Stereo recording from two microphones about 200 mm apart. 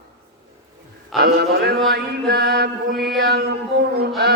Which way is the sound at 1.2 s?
55° right (ahead or behind).